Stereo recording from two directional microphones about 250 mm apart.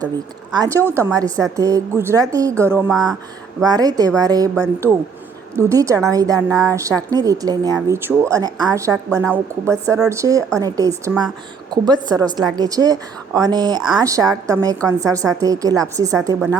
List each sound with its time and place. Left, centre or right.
0.5 s a woman's voice: centre